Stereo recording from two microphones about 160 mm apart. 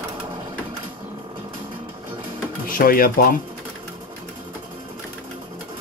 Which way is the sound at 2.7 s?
65° left (ahead or behind).